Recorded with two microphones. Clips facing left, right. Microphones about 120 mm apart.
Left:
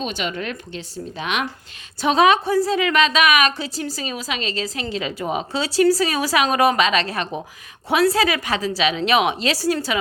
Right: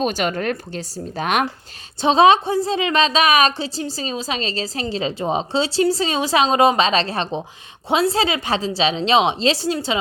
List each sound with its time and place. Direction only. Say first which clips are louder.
0.0 s a woman's voice: right 5 dB; 45° right (ahead or behind)
2.0 s a woman's voice: right 3 dB; 25° right (ahead or behind)